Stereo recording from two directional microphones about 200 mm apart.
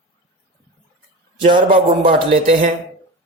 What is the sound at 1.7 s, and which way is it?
Speech, 25° right (ahead or behind).